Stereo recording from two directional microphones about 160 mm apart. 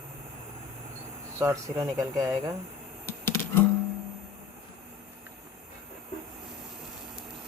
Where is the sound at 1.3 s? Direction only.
20° right (ahead or behind).